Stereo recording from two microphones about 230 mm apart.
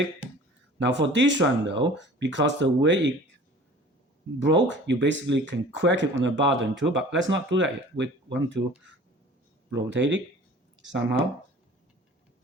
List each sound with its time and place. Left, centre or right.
0.8 s speech: right
4.4 s speech: right
9.7 s speech: right